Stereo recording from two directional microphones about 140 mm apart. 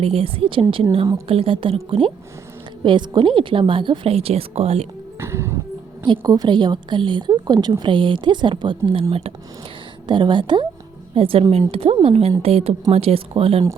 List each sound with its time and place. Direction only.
0.0 s speech: 45° right (ahead or behind)
5.2 s music: 20° right (ahead or behind)
6.1 s speech: 30° right (ahead or behind)
10.1 s speech: 35° right (ahead or behind)